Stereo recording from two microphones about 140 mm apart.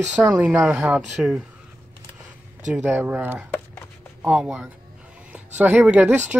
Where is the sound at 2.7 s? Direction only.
15° right (ahead or behind).